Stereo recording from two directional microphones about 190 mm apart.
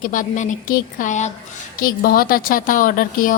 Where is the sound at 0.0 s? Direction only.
45° left (ahead or behind).